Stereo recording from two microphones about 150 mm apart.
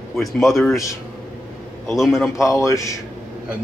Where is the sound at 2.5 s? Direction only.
20° left (ahead or behind).